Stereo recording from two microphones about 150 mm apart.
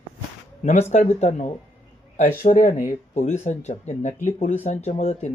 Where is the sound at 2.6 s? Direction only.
65° left (ahead or behind).